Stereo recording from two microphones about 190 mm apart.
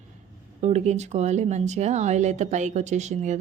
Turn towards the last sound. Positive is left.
turn(degrees=-40)  # may be behind; listen again after turning